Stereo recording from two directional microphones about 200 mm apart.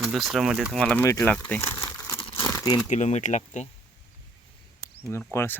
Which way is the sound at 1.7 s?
15° left (ahead or behind).